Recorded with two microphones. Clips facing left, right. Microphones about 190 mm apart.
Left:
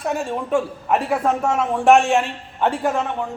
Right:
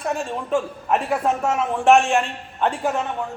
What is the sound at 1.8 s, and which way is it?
A woman's voice, centre (ahead or behind).